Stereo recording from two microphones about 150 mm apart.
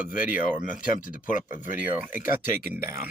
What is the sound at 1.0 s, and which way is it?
Speech, 60° left (ahead or behind).